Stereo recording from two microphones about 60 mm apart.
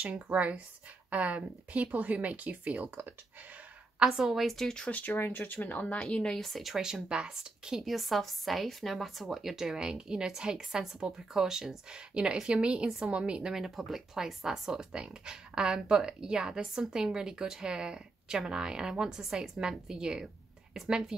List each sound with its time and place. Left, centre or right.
0.0 s speech: right
4.0 s a woman's voice: centre
4.8 s speech: left
6.0 s speech: centre